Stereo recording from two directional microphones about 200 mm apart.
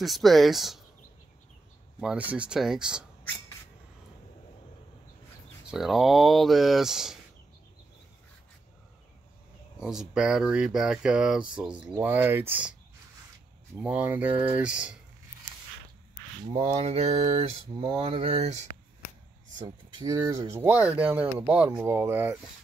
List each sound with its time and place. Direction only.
0.0 s speech: centre (ahead or behind)
2.0 s speech: 5° right (ahead or behind)
5.7 s speech: centre (ahead or behind)
9.8 s speech: 5° right (ahead or behind)
13.7 s speech: 5° right (ahead or behind)
16.6 s mantra: 30° right (ahead or behind)
19.6 s speech: 20° right (ahead or behind)